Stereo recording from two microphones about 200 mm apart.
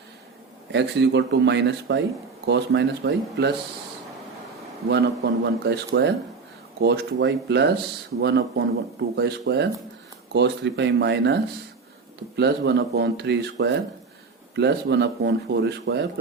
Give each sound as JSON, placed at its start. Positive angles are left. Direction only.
{"t": 0.7, "sound": "speech", "side_deg": -60}
{"t": 4.9, "sound": "speech", "side_deg": -55}
{"t": 12.4, "sound": "speech", "side_deg": -55}